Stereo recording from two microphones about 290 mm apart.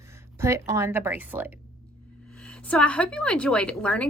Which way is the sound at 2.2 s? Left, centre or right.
Centre.